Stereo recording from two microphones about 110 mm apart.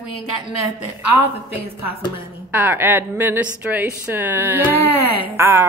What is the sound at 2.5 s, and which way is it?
A woman's voice, 15° right (ahead or behind).